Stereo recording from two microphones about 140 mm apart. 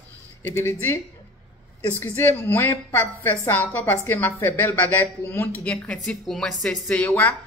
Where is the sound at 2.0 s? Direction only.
15° left (ahead or behind).